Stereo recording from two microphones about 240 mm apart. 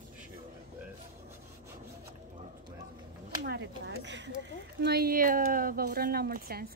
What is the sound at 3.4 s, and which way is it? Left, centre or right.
A woman's voice, right.